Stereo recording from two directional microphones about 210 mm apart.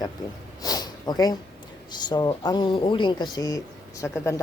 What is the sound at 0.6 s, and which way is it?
Snort, 20° left (ahead or behind).